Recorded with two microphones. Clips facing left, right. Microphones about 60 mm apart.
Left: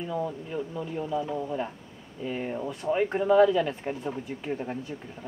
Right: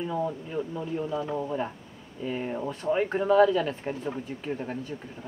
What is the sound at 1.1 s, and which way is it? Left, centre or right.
Speech, right.